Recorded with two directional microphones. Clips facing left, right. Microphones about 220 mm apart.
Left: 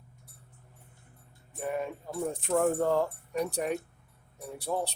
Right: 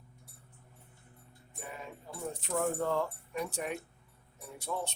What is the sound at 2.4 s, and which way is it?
Speech, 45° left (ahead or behind).